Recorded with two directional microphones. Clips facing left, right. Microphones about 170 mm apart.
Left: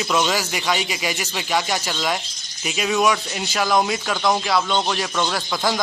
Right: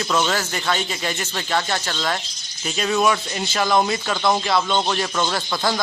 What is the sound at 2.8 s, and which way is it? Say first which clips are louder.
Speech: even; 5° left (ahead or behind).